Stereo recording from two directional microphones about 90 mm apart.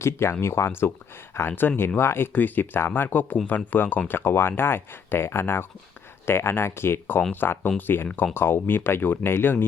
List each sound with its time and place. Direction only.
0.0 s speech: 30° left (ahead or behind)
7.2 s speech: 15° left (ahead or behind)
7.4 s speech: 25° left (ahead or behind)